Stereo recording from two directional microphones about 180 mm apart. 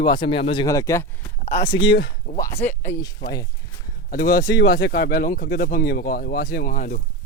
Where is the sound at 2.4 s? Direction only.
15° left (ahead or behind).